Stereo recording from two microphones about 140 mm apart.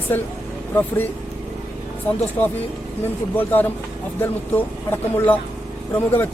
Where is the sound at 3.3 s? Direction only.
15° left (ahead or behind).